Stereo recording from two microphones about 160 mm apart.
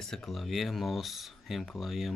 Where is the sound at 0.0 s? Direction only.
Centre (ahead or behind).